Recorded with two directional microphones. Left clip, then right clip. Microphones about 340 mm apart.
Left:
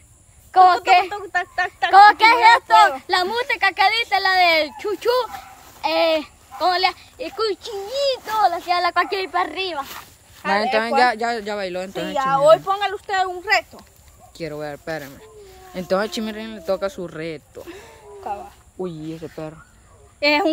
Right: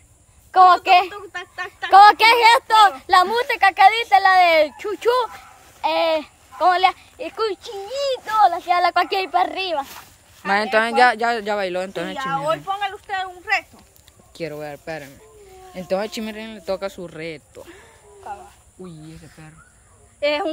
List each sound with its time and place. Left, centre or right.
0.5 s a woman's voice: centre
1.1 s speech: centre
1.9 s speech: right
10.5 s speech: centre
12.3 s a child's voice: centre
14.3 s speech: centre
17.6 s a sound: left
18.8 s a child's voice: centre
20.2 s speech: left